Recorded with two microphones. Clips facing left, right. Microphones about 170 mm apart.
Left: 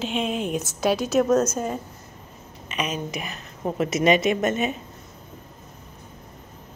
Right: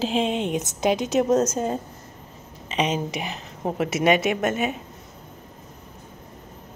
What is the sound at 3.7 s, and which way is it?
A woman's voice, 10° right (ahead or behind).